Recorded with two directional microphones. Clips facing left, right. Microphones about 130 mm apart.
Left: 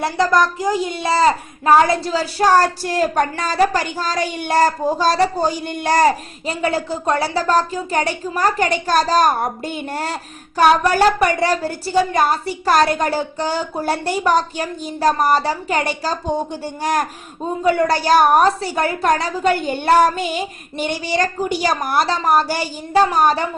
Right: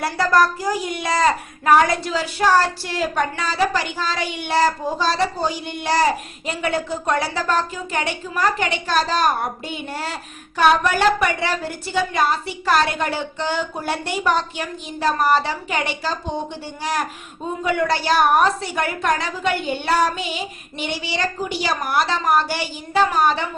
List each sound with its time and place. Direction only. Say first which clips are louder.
0.0 s a child's voice: left 1 dB; 20° left (ahead or behind); by 16.1 s 40° left (ahead or behind)
17.6 s a child's voice: left 4 dB; 35° left (ahead or behind)